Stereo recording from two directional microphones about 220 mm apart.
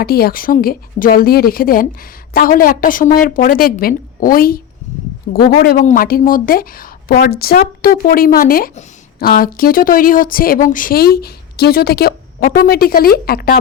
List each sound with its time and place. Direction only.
0.0 s a woman's voice: 45° left (ahead or behind)